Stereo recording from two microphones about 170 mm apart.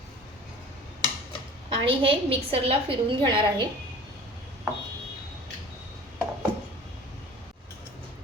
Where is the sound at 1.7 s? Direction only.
30° right (ahead or behind).